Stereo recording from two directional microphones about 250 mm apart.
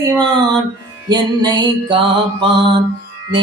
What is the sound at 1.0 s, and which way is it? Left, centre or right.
Music, centre.